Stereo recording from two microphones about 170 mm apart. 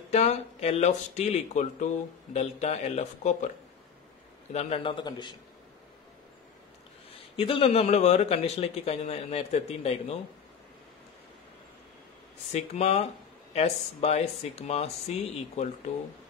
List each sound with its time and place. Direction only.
0.1 s speech: 40° left (ahead or behind)
4.5 s speech: 40° left (ahead or behind)
7.3 s speech: 35° left (ahead or behind)
12.5 s speech: 40° left (ahead or behind)